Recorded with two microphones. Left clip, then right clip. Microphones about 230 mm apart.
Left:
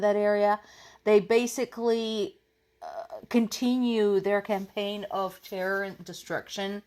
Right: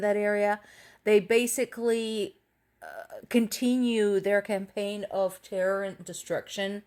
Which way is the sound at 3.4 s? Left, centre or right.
Left.